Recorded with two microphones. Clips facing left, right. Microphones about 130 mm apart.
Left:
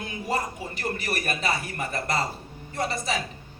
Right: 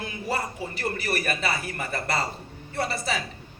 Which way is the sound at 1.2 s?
40° left (ahead or behind).